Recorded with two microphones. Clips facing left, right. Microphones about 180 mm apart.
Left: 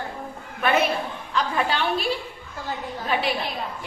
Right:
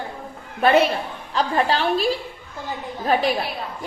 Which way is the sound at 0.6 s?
35° right (ahead or behind).